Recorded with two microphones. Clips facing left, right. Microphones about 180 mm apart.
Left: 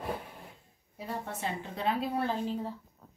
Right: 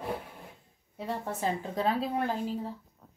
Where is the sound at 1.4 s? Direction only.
40° right (ahead or behind).